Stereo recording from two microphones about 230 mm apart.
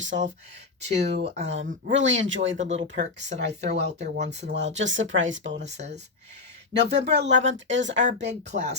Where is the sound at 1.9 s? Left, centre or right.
Right.